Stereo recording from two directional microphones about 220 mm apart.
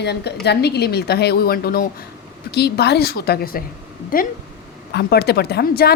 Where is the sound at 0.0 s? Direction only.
50° left (ahead or behind).